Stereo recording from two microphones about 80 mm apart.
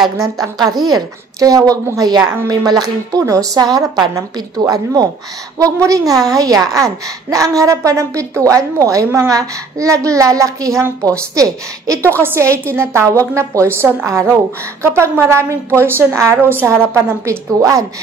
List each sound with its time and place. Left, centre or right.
0.4 s a woman's voice: right
12.2 s a woman's voice: right